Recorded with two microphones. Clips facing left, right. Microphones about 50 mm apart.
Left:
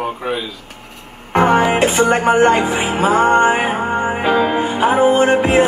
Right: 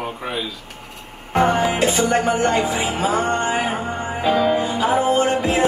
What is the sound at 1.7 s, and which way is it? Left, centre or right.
Music, left.